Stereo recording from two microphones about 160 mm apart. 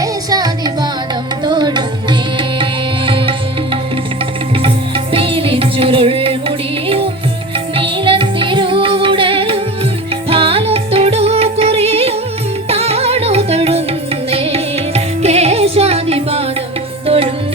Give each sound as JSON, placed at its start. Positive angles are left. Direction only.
{"t": 0.0, "sound": "music", "side_deg": -25}
{"t": 5.1, "sound": "music", "side_deg": -35}